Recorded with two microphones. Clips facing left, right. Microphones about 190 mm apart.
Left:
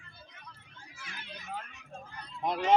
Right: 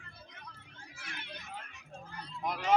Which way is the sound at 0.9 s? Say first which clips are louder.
Right 1 dB; 55° right (ahead or behind).